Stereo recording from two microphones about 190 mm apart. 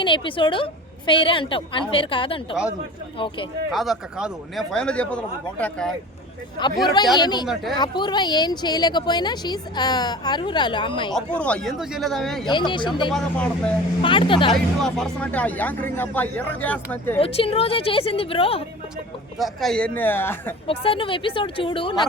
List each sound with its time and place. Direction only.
0.0 s a woman's voice: 25° left (ahead or behind)
3.7 s speech: centre (ahead or behind)
6.8 s a woman's voice: 25° left (ahead or behind)
7.4 s speech: centre (ahead or behind)
7.8 s a woman's voice: 25° left (ahead or behind)
11.1 s speech: 5° left (ahead or behind)
12.5 s a woman's voice: 25° left (ahead or behind)
13.1 s speech: 5° left (ahead or behind)
14.0 s a woman's voice: 25° left (ahead or behind)
14.8 s speech: 5° left (ahead or behind)
17.2 s a woman's voice: 30° left (ahead or behind)
19.4 s speech: centre (ahead or behind)
20.7 s a woman's voice: 30° left (ahead or behind)